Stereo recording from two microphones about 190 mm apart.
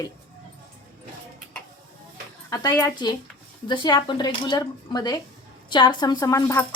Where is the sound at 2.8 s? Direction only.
20° left (ahead or behind).